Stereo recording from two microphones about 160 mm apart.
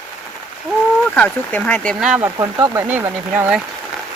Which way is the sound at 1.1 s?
10° left (ahead or behind).